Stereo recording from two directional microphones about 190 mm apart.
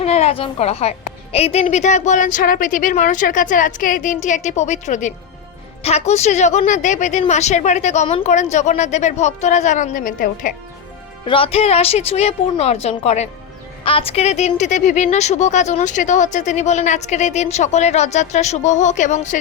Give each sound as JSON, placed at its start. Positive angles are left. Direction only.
{"t": 0.0, "sound": "speech", "side_deg": 35}
{"t": 11.3, "sound": "speech", "side_deg": 30}